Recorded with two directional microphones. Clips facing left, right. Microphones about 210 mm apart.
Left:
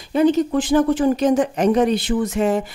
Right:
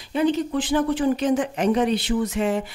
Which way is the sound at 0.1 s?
40° left (ahead or behind).